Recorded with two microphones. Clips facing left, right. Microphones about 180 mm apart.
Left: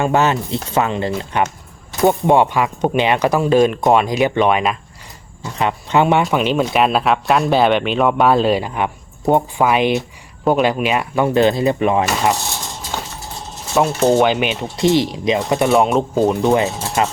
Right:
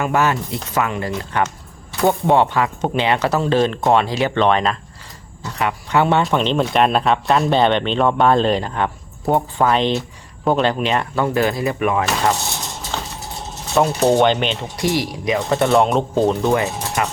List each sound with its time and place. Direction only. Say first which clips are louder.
0.0 s speech: left 2 dB; 25° left (ahead or behind); by 4.8 s 10° left (ahead or behind)
5.5 s speech: left 2 dB; 20° left (ahead or behind)
13.7 s cutlery: left 1 dB; centre (ahead or behind)
14.8 s speech: left 6 dB; 25° left (ahead or behind)